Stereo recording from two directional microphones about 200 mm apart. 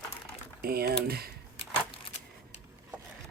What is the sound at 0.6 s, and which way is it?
Speech, 50° right (ahead or behind).